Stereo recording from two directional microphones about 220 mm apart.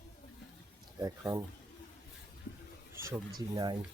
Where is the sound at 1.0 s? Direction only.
15° right (ahead or behind).